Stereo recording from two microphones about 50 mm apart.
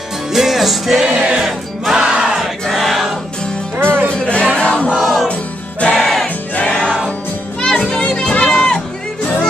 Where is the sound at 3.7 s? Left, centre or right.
Right.